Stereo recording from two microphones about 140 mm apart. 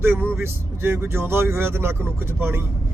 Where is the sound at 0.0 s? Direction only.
15° right (ahead or behind).